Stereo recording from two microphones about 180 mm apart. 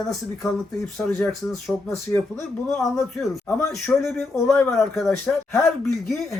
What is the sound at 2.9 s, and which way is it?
Speech, 15° left (ahead or behind).